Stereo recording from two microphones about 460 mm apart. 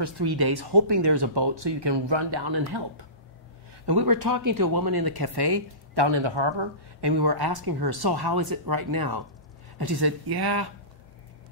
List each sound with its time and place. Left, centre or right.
0.0 s speech: right